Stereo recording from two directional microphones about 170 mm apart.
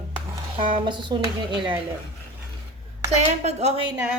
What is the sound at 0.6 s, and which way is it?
Speech, 30° right (ahead or behind).